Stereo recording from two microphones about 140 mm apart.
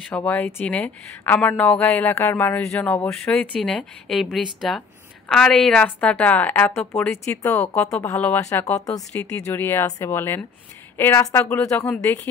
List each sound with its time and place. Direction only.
0.1 s a woman's voice: 10° left (ahead or behind)
9.1 s speech: 10° left (ahead or behind)